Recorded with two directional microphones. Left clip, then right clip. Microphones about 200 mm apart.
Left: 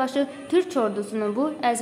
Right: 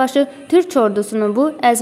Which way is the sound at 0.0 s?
35° right (ahead or behind).